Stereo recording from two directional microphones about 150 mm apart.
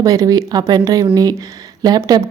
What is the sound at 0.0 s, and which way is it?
Speech, 25° right (ahead or behind).